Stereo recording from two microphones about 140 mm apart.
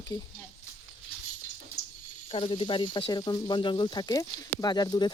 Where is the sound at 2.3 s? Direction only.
40° left (ahead or behind).